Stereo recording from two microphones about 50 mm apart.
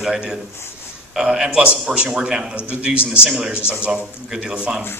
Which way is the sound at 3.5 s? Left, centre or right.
Right.